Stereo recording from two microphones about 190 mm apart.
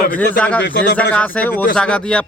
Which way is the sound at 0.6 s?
65° left (ahead or behind).